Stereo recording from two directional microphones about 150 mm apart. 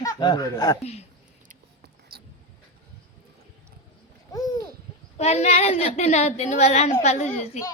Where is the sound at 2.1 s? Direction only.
90° right.